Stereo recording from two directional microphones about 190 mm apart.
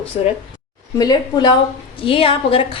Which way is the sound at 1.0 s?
20° left (ahead or behind).